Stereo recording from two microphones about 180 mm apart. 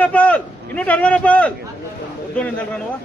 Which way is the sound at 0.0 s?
5° left (ahead or behind).